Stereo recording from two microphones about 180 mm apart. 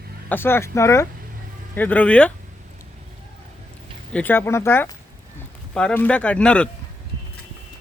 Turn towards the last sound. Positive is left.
turn(degrees=5)  # may be behind; listen again after turning